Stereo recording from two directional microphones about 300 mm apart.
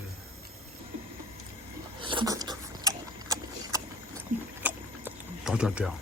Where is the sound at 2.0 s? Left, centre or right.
Centre.